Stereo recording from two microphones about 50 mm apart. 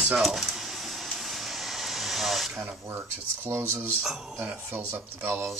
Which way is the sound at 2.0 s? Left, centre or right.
Centre.